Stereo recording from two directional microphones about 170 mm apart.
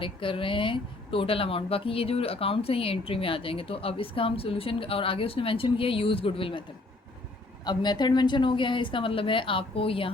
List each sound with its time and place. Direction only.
0.0 s speech: 30° left (ahead or behind)
7.6 s a woman's voice: 25° left (ahead or behind)